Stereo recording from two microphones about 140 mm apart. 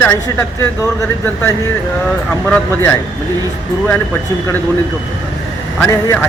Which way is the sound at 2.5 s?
15° left (ahead or behind).